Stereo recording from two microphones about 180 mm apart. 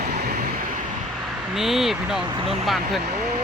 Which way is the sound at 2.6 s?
Centre (ahead or behind).